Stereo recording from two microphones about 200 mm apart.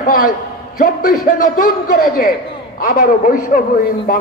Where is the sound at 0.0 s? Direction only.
45° left (ahead or behind).